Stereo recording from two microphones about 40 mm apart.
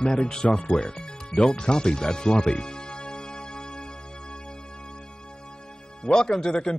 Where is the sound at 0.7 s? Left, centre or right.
Centre.